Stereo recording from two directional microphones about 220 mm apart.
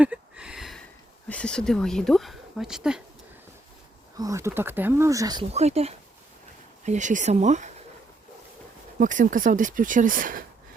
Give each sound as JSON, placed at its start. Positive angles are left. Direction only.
{"t": 0.0, "sound": "a sound", "side_deg": -5}
{"t": 1.3, "sound": "a woman's voice", "side_deg": 5}
{"t": 4.2, "sound": "speech", "side_deg": -15}
{"t": 5.5, "sound": "speech", "side_deg": -30}
{"t": 9.0, "sound": "speech", "side_deg": -35}